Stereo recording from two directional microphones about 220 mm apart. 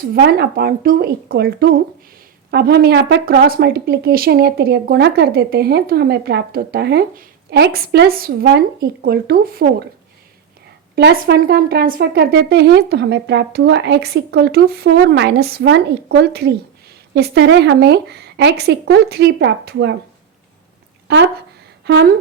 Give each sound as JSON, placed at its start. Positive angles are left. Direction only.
{"t": 0.0, "sound": "speech", "side_deg": -45}
{"t": 10.9, "sound": "speech", "side_deg": -45}
{"t": 21.8, "sound": "speech", "side_deg": -50}